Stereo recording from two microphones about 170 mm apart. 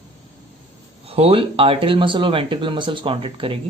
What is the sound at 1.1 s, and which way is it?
Speech, 35° right (ahead or behind).